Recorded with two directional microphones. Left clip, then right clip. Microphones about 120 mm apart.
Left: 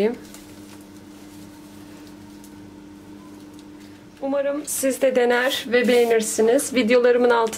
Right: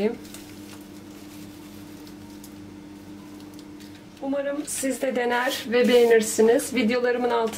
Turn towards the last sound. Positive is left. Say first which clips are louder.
# left 6 dB
turn(degrees=35)  # may be behind; listen again after turning